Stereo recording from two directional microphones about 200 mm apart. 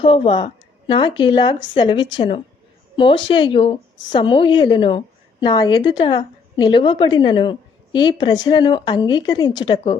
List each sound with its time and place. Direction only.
0.0 s a woman's voice: 25° left (ahead or behind)